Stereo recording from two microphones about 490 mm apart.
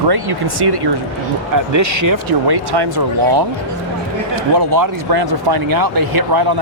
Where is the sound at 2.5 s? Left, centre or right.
Right.